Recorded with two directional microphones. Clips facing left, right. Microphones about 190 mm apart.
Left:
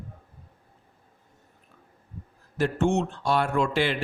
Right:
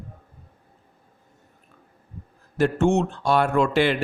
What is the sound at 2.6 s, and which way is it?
A man's voice, 55° right (ahead or behind).